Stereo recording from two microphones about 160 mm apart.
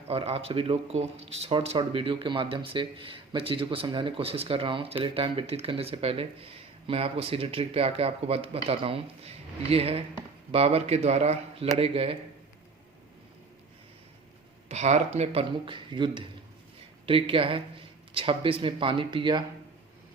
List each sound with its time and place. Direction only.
0.1 s a man's voice: 35° right (ahead or behind)
14.7 s a man's voice: 45° right (ahead or behind); by 19.5 s 30° right (ahead or behind)